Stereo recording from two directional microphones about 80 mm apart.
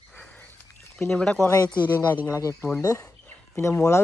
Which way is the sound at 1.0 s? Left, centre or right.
Centre.